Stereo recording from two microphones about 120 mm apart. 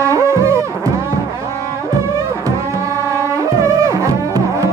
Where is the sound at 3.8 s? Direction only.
25° right (ahead or behind).